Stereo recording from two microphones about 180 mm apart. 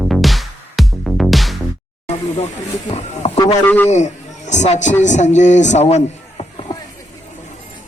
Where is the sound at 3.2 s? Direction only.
35° left (ahead or behind).